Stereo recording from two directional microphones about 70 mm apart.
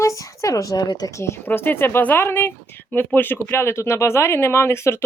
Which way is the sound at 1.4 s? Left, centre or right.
Left.